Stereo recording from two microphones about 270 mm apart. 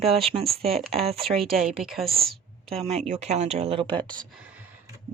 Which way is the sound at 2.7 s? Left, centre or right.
Right.